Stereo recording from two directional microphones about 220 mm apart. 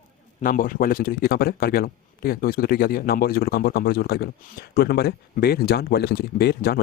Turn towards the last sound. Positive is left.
turn(degrees=45)  # may be behind; listen again after turning